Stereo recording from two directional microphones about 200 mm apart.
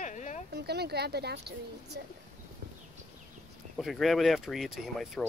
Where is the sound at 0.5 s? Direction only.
55° right (ahead or behind).